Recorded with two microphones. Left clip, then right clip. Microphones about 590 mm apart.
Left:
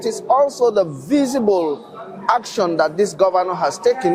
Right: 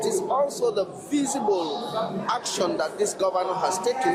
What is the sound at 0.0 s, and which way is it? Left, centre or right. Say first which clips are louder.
Speech: left 8 dB; left.